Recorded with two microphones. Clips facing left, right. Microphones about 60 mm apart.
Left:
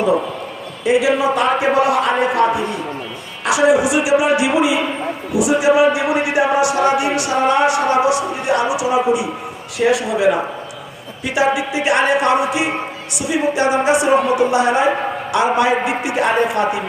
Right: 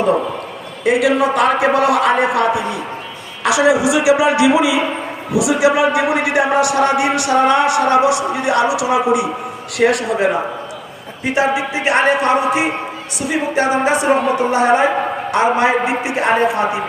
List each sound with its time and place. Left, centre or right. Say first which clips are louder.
0.9 s a man's voice: right 1 dB; right
3.4 s a man's voice: even; right
9.7 s speech: right 1 dB; right
11.2 s a woman's voice: right 1 dB; right